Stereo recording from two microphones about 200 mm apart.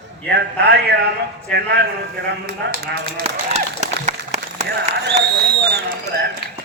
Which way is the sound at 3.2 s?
35° right (ahead or behind).